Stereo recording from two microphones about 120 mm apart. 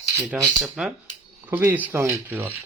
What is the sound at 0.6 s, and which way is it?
Speech, 5° right (ahead or behind).